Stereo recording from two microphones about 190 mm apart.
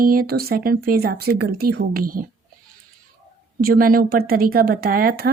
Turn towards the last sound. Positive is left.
turn(degrees=-50)  # may be behind; listen again after turning